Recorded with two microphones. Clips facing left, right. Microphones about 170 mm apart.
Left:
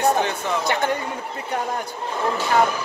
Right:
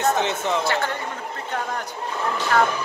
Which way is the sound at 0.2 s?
20° right (ahead or behind).